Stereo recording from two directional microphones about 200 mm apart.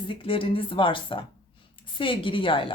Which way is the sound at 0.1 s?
25° left (ahead or behind).